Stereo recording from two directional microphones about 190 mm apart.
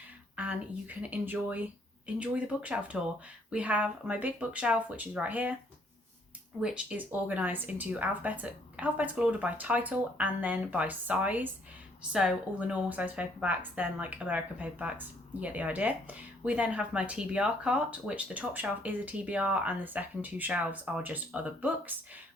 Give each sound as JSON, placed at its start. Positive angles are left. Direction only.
{"t": 0.3, "sound": "a woman's voice", "side_deg": -10}
{"t": 6.6, "sound": "a woman's voice", "side_deg": -5}